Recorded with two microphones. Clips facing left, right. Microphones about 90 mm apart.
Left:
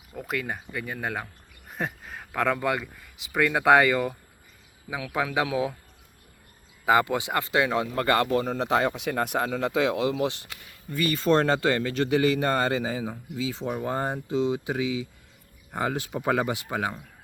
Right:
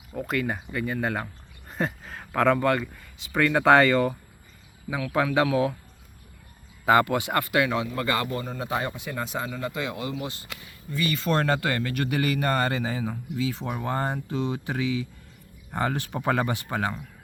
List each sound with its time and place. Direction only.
0.2 s speech: centre (ahead or behind)
6.8 s speech: 15° left (ahead or behind)
7.8 s a man's voice: 50° left (ahead or behind); by 10.5 s 85° left
10.9 s speech: 40° left (ahead or behind); by 17.0 s 10° left (ahead or behind)